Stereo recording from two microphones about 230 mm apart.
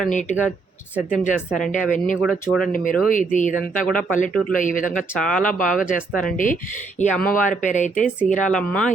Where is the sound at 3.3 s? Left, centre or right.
Left.